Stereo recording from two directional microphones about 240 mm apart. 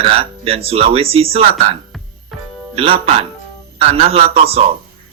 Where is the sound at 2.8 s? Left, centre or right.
Right.